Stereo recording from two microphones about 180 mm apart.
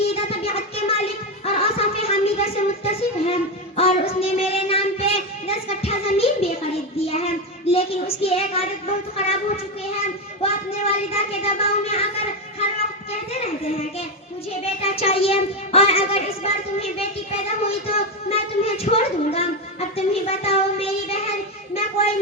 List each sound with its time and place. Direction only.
0.0 s music: 35° left (ahead or behind)
7.0 s speech: 35° left (ahead or behind)
10.4 s a sound: 35° left (ahead or behind)
14.6 s child singing: 35° left (ahead or behind)